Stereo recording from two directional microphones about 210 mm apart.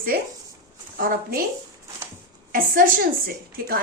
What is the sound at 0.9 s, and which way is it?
Speech, 45° right (ahead or behind).